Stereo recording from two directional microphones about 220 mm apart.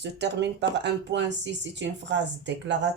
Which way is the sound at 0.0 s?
50° right (ahead or behind).